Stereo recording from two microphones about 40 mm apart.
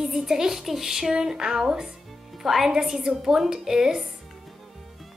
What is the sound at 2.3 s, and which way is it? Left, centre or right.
Speech, centre.